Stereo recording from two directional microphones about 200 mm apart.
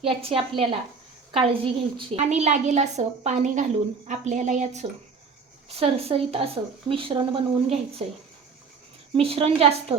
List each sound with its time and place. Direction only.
0.0 s a woman's voice: 30° right (ahead or behind)
9.1 s speech: 30° right (ahead or behind)